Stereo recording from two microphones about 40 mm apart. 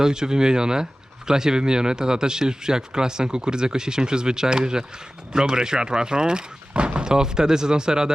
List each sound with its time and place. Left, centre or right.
0.0 s speech: centre